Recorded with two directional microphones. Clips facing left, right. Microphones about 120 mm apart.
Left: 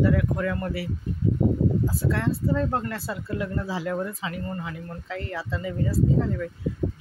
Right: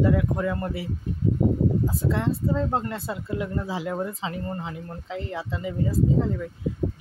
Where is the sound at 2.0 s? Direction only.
20° right (ahead or behind).